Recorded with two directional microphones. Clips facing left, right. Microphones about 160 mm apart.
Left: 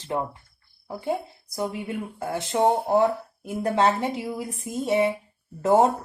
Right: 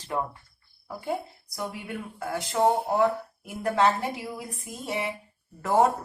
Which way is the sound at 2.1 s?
25° left (ahead or behind).